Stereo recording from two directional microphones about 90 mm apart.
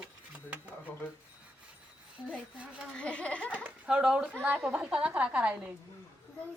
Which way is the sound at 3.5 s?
15° right (ahead or behind).